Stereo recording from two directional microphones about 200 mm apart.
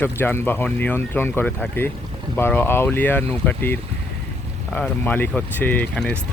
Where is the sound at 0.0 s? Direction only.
10° left (ahead or behind).